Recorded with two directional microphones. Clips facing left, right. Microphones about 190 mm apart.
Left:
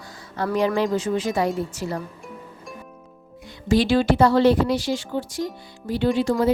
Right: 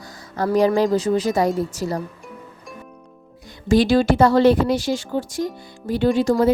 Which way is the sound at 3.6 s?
45° right (ahead or behind).